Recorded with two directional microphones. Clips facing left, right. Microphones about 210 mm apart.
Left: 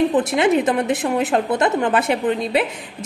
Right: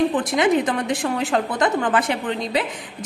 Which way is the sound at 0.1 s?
25° left (ahead or behind).